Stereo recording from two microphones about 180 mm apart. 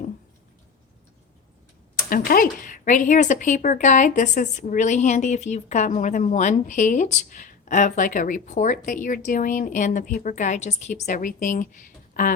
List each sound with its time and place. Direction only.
2.0 s speech: 50° left (ahead or behind)